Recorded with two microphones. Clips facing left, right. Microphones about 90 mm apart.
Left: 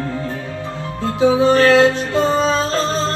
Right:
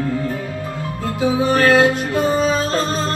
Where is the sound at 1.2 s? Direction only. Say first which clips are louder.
Left 4 dB; 30° left (ahead or behind).